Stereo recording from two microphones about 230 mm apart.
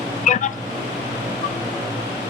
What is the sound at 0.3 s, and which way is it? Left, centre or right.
Vehicle, left.